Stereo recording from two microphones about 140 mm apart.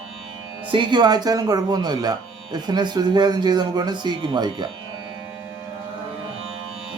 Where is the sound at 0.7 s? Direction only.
35° right (ahead or behind).